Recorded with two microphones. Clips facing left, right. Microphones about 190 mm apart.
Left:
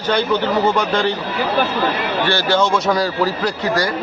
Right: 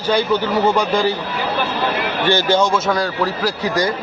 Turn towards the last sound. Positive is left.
turn(degrees=-20)  # may be behind; listen again after turning